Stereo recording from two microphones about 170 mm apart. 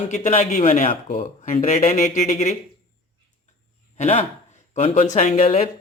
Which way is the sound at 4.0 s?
40° left (ahead or behind).